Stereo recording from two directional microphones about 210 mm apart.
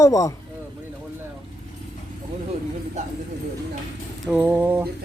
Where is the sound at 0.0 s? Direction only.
15° left (ahead or behind).